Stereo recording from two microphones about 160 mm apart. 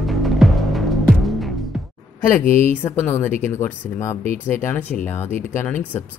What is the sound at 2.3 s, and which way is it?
Speech, 15° left (ahead or behind).